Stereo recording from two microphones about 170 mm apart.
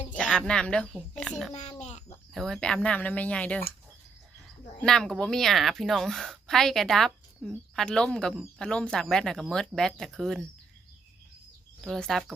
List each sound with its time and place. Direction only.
0.1 s speech: 5° left (ahead or behind)
1.2 s a sound: 5° left (ahead or behind)
1.5 s a child's voice: 40° left (ahead or behind)
2.3 s speech: centre (ahead or behind)
4.8 s a woman's voice: 5° left (ahead or behind)
11.8 s a woman's voice: centre (ahead or behind)